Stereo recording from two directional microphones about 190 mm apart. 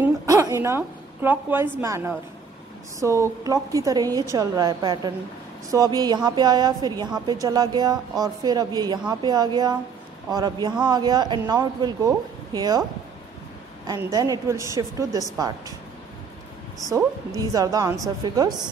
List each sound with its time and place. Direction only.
0.0 s a woman's voice: 15° right (ahead or behind)
13.8 s a woman's voice: 20° right (ahead or behind)
16.8 s speech: 20° right (ahead or behind)